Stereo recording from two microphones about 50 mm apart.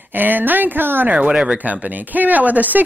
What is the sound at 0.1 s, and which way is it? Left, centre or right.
A woman's voice, right.